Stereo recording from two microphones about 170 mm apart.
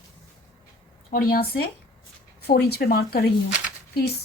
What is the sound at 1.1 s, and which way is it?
Speech, 60° left (ahead or behind).